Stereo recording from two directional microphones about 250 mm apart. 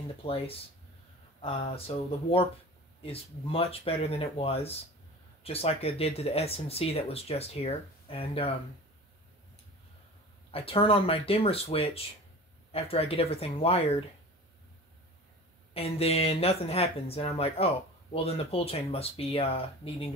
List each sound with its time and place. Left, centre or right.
0.2 s speech: left
1.9 s speech: left
10.5 s speech: left
15.7 s speech: left